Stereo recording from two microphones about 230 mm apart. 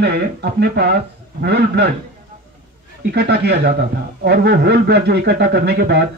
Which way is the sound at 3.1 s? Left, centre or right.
Right.